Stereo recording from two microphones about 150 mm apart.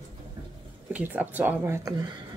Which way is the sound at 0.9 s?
10° right (ahead or behind).